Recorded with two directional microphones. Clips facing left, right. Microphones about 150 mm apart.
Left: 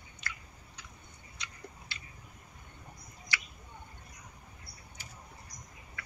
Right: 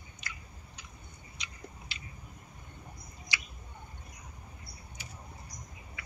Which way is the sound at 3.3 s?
15° right (ahead or behind).